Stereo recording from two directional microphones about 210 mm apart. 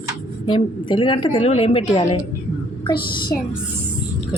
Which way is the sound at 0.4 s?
25° left (ahead or behind).